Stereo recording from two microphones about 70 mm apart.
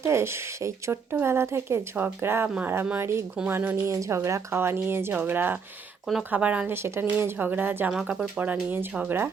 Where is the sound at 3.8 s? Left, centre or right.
Right.